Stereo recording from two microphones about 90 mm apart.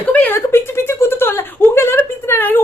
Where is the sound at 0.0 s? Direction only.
20° left (ahead or behind).